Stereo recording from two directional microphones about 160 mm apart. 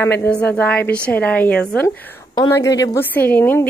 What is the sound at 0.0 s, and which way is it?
Speech, 15° left (ahead or behind).